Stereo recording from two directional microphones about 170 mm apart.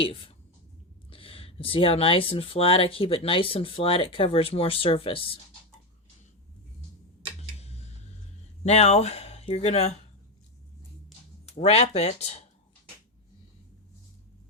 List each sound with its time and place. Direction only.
0.0 s speech: 30° left (ahead or behind)
8.6 s speech: 40° left (ahead or behind)
11.5 s speech: 35° left (ahead or behind)